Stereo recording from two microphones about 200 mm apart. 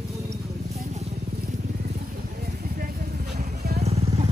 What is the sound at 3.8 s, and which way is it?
Vehicle, 35° right (ahead or behind).